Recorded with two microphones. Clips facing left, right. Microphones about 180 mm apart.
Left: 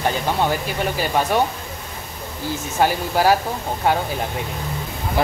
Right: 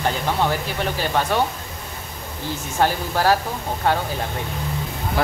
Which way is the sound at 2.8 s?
10° left (ahead or behind).